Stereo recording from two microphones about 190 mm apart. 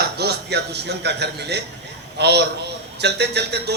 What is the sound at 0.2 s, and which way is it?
A man's voice, 60° right (ahead or behind).